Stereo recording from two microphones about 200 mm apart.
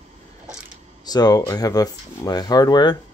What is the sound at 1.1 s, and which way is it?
Speech, 20° left (ahead or behind).